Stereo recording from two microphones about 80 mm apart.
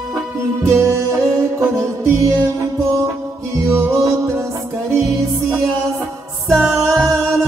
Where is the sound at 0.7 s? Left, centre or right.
Right.